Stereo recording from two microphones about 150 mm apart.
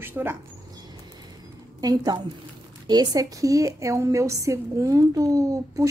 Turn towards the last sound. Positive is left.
turn(degrees=-20)  # may be behind; listen again after turning